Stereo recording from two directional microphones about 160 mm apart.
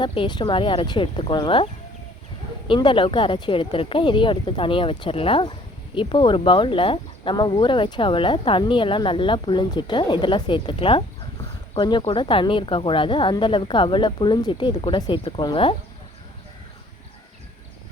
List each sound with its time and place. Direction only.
0.0 s speech: 30° left (ahead or behind)
2.6 s speech: 30° left (ahead or behind)